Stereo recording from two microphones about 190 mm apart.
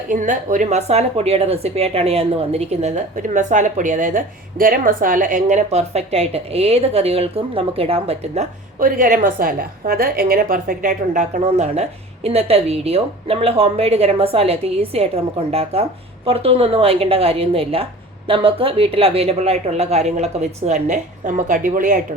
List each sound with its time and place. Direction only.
0.1 s a woman's voice: 45° right (ahead or behind)
8.8 s a woman's voice: 45° right (ahead or behind)